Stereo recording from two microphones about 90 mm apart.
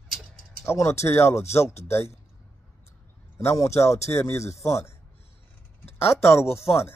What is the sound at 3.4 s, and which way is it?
Speech, 35° left (ahead or behind).